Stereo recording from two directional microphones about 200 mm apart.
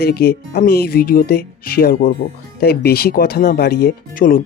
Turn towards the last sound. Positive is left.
turn(degrees=45)  # may be behind; listen again after turning